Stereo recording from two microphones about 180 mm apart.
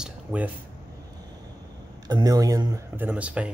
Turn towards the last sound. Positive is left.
turn(degrees=-5)  # may be behind; listen again after turning